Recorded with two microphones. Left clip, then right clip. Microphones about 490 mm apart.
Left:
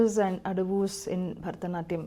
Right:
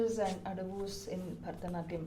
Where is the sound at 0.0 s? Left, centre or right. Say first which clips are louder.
Left 8 dB; left.